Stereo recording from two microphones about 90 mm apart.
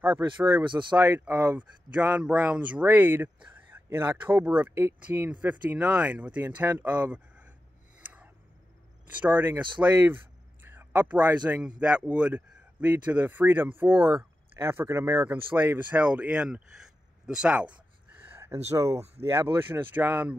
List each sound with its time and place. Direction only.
0.0 s speech: 20° right (ahead or behind)
0.7 s speech: 60° right (ahead or behind)
0.9 s speech: 20° right (ahead or behind)
9.2 s speech: 20° right (ahead or behind)
18.4 s speech: 30° right (ahead or behind)